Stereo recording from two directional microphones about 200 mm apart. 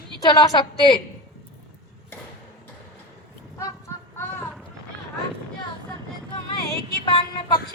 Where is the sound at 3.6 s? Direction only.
15° left (ahead or behind).